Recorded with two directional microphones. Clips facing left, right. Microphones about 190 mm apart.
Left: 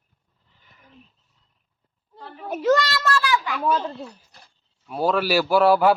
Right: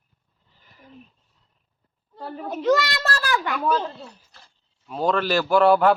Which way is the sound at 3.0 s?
40° right (ahead or behind).